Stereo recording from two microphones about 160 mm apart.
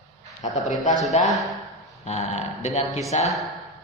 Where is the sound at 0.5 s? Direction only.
50° left (ahead or behind).